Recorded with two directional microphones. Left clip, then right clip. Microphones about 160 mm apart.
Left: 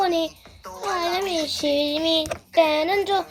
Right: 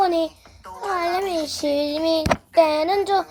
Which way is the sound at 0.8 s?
20° right (ahead or behind).